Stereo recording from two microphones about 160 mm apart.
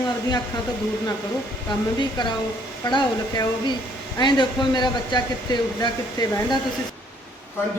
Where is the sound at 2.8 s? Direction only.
25° left (ahead or behind).